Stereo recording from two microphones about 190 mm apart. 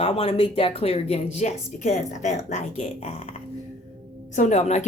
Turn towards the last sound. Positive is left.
turn(degrees=35)  # may be behind; listen again after turning